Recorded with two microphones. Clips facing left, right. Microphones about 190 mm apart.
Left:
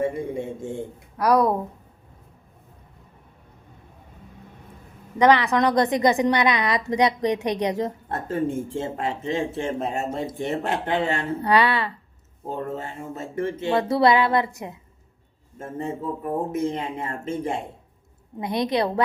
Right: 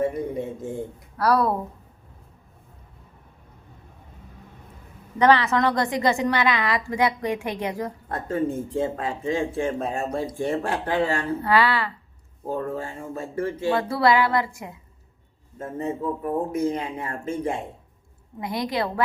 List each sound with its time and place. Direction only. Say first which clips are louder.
0.0 s speech: even; 25° left (ahead or behind)
1.1 s a woman's voice: left 2 dB; 15° left (ahead or behind)
5.2 s speech: left 1 dB; 15° left (ahead or behind)